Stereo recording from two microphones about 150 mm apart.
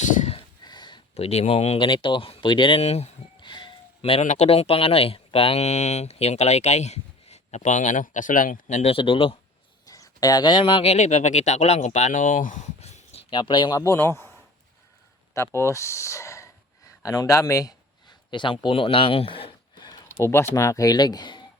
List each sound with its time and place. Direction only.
0.0 s a sound: 55° left (ahead or behind)
0.6 s a sound: 30° left (ahead or behind)
1.1 s speech: 45° left (ahead or behind)
9.8 s speech: 25° left (ahead or behind)
10.9 s speech: 50° left (ahead or behind)
13.3 s speech: 30° left (ahead or behind)
13.8 s a man's voice: 20° left (ahead or behind)
15.3 s speech: 20° left (ahead or behind)